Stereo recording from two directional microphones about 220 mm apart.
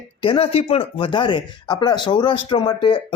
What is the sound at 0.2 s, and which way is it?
Speech, 25° left (ahead or behind).